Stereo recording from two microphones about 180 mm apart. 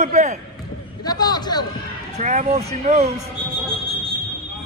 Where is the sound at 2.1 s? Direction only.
45° right (ahead or behind).